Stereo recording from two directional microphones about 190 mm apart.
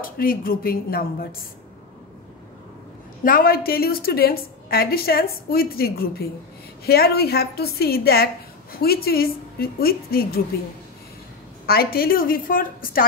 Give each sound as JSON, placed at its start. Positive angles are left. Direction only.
{"t": 0.0, "sound": "a woman's voice", "side_deg": 50}
{"t": 3.3, "sound": "a woman's voice", "side_deg": 50}
{"t": 11.6, "sound": "a woman's voice", "side_deg": 55}